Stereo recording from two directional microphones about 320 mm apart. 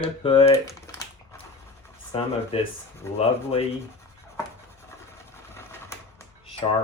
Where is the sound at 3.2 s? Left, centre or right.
Centre.